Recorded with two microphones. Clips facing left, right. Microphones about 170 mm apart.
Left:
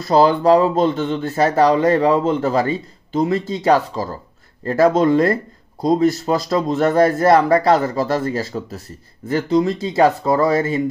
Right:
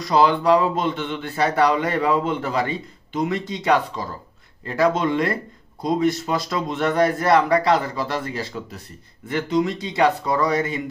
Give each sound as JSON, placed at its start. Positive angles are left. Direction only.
{"t": 0.1, "sound": "speech", "side_deg": 40}